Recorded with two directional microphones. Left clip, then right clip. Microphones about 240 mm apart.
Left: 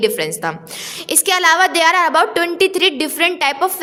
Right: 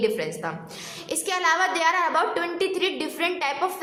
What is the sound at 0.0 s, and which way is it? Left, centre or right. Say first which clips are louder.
A woman's voice: left 8 dB; left.